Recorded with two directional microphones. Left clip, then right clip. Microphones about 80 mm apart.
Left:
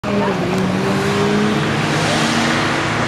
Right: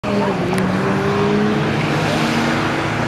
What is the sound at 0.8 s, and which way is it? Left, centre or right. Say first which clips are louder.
Vehicle: left 1 dB; left.